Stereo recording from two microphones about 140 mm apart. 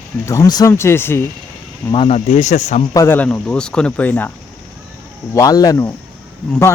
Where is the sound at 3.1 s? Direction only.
10° left (ahead or behind).